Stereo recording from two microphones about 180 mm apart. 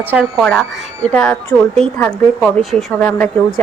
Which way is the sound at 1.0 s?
10° left (ahead or behind).